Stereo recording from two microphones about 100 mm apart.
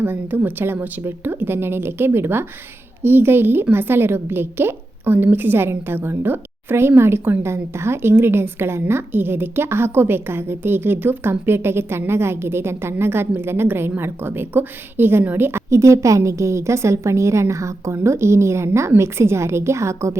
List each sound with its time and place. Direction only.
0.0 s a woman's voice: 20° right (ahead or behind)